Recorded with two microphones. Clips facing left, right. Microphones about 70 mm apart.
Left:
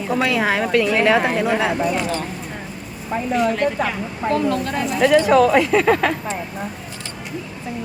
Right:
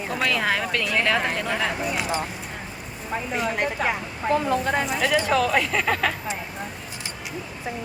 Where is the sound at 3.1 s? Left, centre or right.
Centre.